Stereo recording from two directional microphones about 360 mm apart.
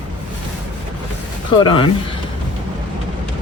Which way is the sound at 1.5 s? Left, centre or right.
Centre.